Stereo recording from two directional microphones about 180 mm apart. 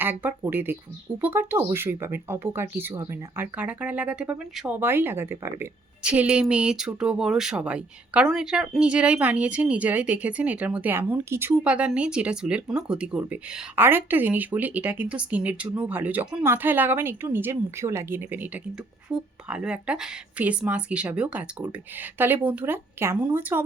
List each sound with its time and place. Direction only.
0.0 s speech: 10° right (ahead or behind)